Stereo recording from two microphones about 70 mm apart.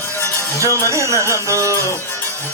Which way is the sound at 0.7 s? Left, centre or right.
Left.